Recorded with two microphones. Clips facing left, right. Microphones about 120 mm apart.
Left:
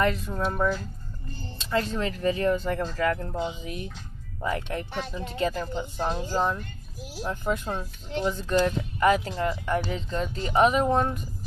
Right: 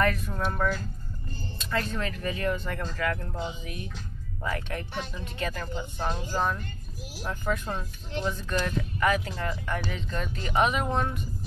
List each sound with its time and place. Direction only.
0.0 s speech: 25° left (ahead or behind)